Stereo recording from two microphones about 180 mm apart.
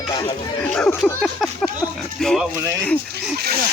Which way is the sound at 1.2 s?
Centre (ahead or behind).